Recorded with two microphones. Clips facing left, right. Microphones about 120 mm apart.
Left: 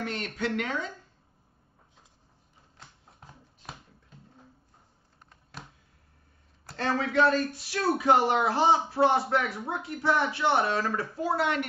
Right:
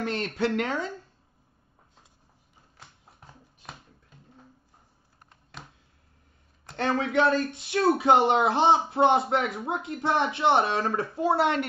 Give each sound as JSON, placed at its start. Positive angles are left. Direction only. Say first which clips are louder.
{"t": 0.0, "sound": "a woman's voice", "louder": "right 4 dB", "side_deg": -30}
{"t": 6.8, "sound": "speech", "louder": "right 1 dB", "side_deg": -20}